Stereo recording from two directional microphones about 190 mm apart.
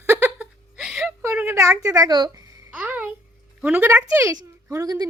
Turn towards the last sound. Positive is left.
turn(degrees=-20)  # may be behind; listen again after turning